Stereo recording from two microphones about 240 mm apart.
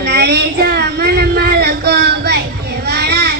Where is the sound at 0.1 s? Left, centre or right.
Right.